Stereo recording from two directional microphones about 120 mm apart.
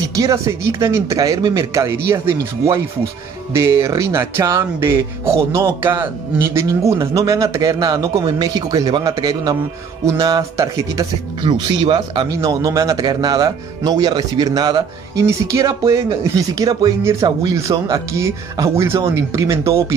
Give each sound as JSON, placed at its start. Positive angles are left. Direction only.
{"t": 0.1, "sound": "speech", "side_deg": -25}
{"t": 3.8, "sound": "speech", "side_deg": -25}
{"t": 11.4, "sound": "speech", "side_deg": -45}
{"t": 12.4, "sound": "speech", "side_deg": -25}